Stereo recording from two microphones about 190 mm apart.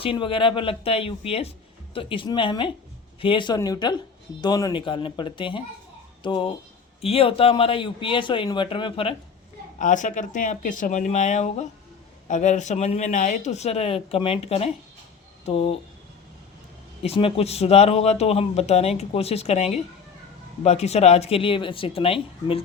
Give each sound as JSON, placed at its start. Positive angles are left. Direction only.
{"t": 0.0, "sound": "speech", "side_deg": 25}
{"t": 9.7, "sound": "speech", "side_deg": 40}
{"t": 17.0, "sound": "speech", "side_deg": 30}